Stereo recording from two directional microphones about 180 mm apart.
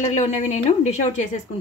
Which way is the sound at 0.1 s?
40° left (ahead or behind).